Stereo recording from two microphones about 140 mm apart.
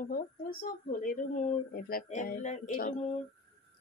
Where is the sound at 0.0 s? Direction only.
90° left.